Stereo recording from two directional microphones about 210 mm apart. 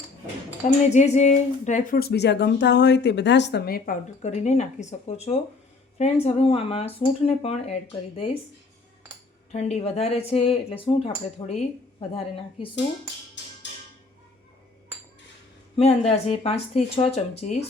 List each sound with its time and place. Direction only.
0.6 s a sound: 35° left (ahead or behind)
0.9 s speech: 35° left (ahead or behind)
9.5 s speech: 30° left (ahead or behind)
13.4 s music: 55° left (ahead or behind)
15.7 s speech: 30° left (ahead or behind)